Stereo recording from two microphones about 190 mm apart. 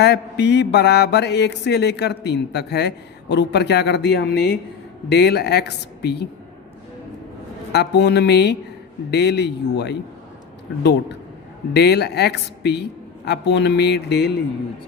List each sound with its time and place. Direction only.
0.0 s mantra: 60° left (ahead or behind)
7.7 s mantra: 60° left (ahead or behind)
11.7 s mantra: 60° left (ahead or behind)